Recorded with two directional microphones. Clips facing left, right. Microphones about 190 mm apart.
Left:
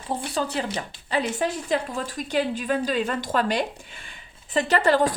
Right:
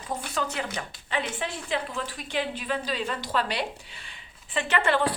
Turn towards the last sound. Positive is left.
turn(degrees=40)  # may be behind; listen again after turning